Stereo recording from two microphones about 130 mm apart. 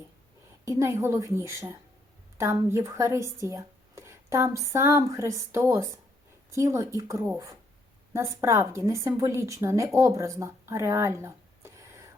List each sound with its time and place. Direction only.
0.6 s a woman's voice: 20° right (ahead or behind)